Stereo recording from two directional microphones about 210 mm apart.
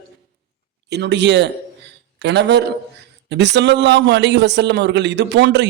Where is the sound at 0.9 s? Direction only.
55° right (ahead or behind).